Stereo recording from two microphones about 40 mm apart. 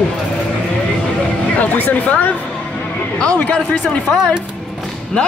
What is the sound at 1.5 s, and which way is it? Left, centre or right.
Speech, left.